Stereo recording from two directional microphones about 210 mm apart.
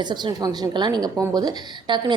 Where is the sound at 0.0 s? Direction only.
20° right (ahead or behind).